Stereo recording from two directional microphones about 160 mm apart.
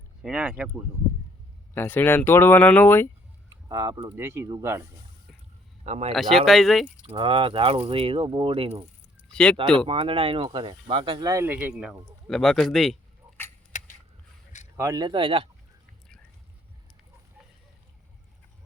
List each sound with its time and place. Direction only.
0.2 s speech: 5° right (ahead or behind)
1.7 s speech: 10° left (ahead or behind)
3.5 s speech: 20° right (ahead or behind)
5.8 s speech: 45° right (ahead or behind)
6.1 s speech: centre (ahead or behind)
7.0 s speech: 30° right (ahead or behind)
9.3 s speech: 5° left (ahead or behind)
9.7 s speech: 35° right (ahead or behind); by 13.0 s centre (ahead or behind)
13.7 s a sound: 50° left (ahead or behind)
14.8 s speech: 20° right (ahead or behind)